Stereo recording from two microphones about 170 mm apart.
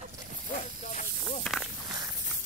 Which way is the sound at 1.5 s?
5° left (ahead or behind).